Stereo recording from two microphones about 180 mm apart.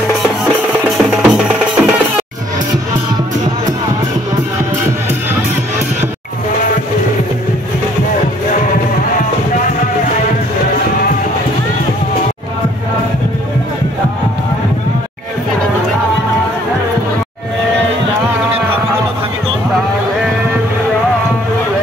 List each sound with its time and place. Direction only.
0.8 s music: 5° right (ahead or behind)